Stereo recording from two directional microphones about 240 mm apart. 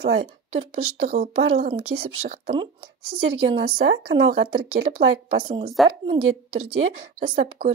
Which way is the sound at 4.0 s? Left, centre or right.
Right.